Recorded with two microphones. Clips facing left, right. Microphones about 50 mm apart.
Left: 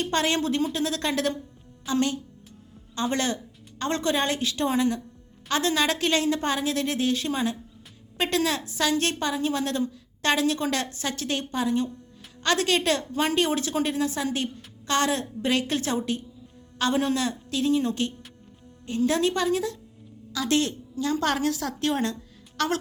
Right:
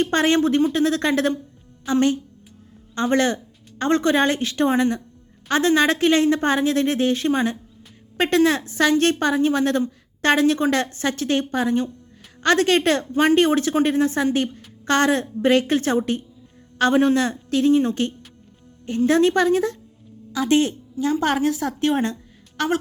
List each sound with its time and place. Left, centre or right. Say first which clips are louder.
0.0 s a woman's voice: right 7 dB; right
20.3 s a woman's voice: right 6 dB; right